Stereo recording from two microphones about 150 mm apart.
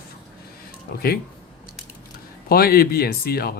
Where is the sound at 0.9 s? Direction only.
80° left.